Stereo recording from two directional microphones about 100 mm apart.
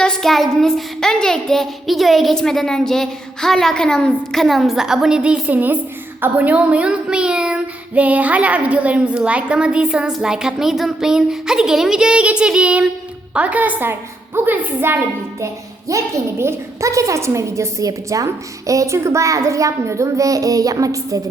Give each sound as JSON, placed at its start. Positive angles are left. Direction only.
{"t": 0.0, "sound": "child singing", "side_deg": 5}
{"t": 14.3, "sound": "a woman's voice", "side_deg": -20}